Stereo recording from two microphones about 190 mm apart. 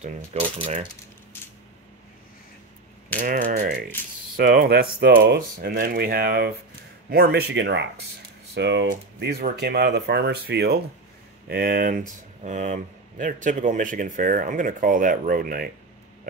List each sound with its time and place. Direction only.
0.0 s coin: 30° right (ahead or behind)
3.2 s speech: 45° right (ahead or behind)